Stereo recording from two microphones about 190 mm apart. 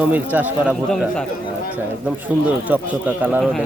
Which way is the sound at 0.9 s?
Centre (ahead or behind).